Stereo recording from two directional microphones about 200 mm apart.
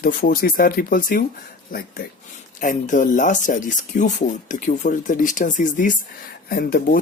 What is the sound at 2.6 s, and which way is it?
Speech, 40° left (ahead or behind).